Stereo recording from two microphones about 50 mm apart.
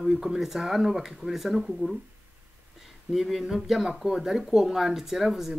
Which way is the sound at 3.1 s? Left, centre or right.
Centre.